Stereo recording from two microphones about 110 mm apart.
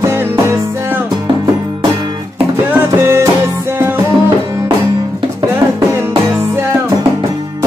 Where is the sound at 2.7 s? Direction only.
25° right (ahead or behind).